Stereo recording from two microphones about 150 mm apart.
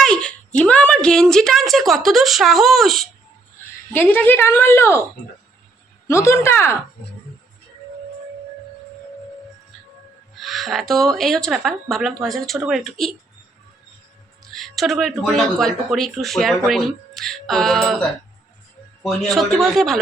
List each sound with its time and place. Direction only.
0.0 s speech: 5° left (ahead or behind)
3.9 s speech: 10° left (ahead or behind)
6.1 s speech: 20° left (ahead or behind)
10.3 s speech: centre (ahead or behind)
14.4 s speech: centre (ahead or behind)
19.0 s speech: centre (ahead or behind)